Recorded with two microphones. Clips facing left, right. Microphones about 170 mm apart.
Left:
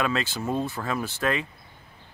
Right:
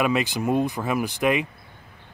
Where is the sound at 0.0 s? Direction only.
15° right (ahead or behind).